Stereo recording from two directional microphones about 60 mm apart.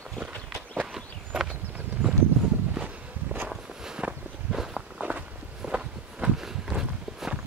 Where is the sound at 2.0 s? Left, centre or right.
Right.